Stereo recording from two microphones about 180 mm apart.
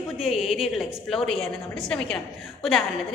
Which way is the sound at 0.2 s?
Centre (ahead or behind).